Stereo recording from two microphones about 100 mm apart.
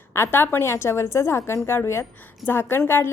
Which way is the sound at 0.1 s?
25° left (ahead or behind).